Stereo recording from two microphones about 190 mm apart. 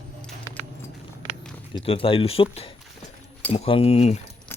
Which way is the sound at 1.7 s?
30° left (ahead or behind).